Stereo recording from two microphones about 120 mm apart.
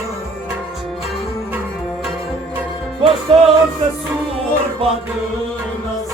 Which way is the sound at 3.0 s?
55° right (ahead or behind).